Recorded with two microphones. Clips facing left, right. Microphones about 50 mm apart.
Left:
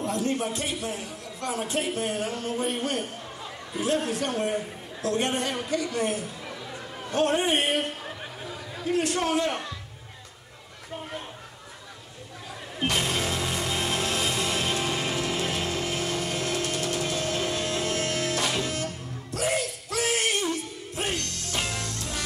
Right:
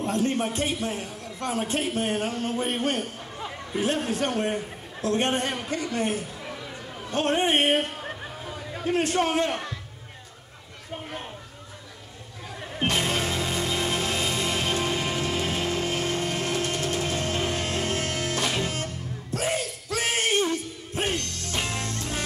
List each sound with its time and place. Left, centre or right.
0.0 s a man's voice: right
8.9 s a man's voice: right
13.0 s music: right
19.3 s a sound: right
20.9 s music: right